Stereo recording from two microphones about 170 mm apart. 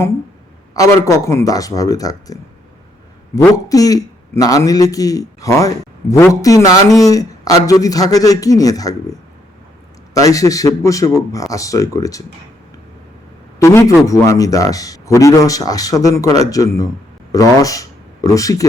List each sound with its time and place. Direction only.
1.0 s a man's voice: 20° left (ahead or behind)
10.2 s a man's voice: 20° left (ahead or behind)
13.6 s a man's voice: 15° left (ahead or behind)